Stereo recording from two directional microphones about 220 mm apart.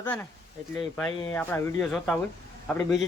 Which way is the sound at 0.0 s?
10° left (ahead or behind).